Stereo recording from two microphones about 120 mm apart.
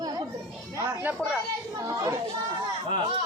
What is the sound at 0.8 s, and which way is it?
Speech, 15° right (ahead or behind).